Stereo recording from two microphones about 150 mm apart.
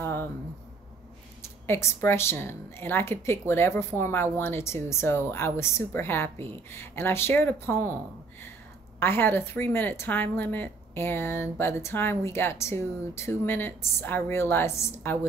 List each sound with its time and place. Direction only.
1.4 s speech: 20° left (ahead or behind)
9.0 s speech: 15° left (ahead or behind)